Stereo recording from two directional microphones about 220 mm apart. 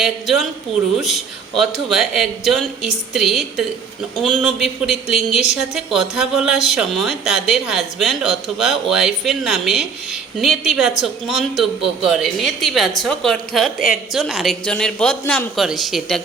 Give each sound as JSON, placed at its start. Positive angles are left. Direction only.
{"t": 0.0, "sound": "a woman's voice", "side_deg": 0}